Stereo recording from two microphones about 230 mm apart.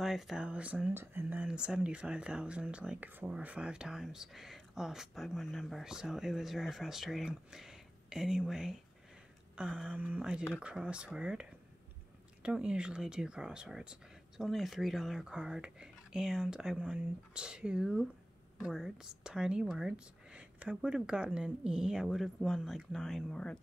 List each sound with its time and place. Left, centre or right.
0.0 s speech: centre
12.4 s speech: centre